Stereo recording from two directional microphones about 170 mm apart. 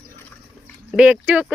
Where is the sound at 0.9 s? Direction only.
5° right (ahead or behind).